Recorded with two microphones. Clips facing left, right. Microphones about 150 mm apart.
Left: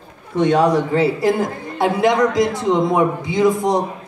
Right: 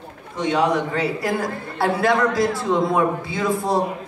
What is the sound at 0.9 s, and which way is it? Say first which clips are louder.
A man's voice: left 6 dB; 25° left (ahead or behind).